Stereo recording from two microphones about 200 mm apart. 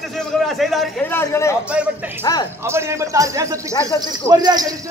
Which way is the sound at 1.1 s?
15° left (ahead or behind).